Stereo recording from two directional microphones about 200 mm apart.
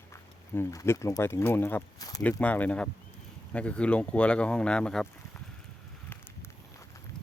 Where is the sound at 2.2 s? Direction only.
5° left (ahead or behind).